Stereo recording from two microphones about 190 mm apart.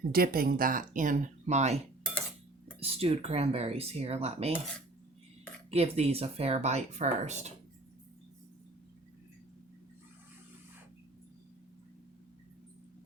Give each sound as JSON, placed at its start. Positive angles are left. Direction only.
{"t": 0.1, "sound": "speech", "side_deg": -50}
{"t": 2.8, "sound": "speech", "side_deg": -30}
{"t": 5.7, "sound": "speech", "side_deg": -30}